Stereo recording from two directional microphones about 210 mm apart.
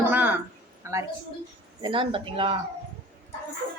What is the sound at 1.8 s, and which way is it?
Speech, 25° right (ahead or behind).